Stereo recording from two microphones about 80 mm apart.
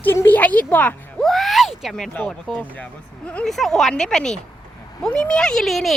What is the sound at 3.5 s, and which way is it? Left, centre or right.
Speech, centre.